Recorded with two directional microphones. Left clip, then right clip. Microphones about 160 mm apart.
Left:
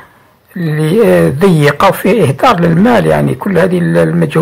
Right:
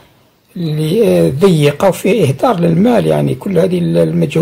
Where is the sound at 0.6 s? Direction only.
10° right (ahead or behind).